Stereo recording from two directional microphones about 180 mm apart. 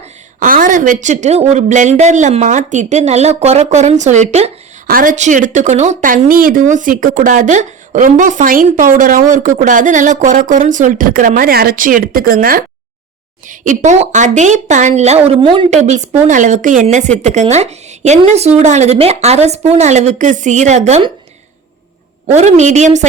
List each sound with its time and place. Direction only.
0.3 s a woman's voice: 50° right (ahead or behind)
4.9 s a woman's voice: 50° right (ahead or behind); by 15.7 s 30° right (ahead or behind)
15.7 s a woman's voice: 40° right (ahead or behind)
22.4 s a woman's voice: 40° right (ahead or behind)